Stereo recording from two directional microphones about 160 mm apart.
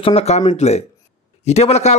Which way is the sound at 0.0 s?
40° left (ahead or behind).